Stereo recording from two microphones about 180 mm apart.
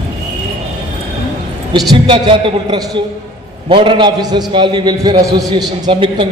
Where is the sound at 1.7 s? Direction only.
30° right (ahead or behind).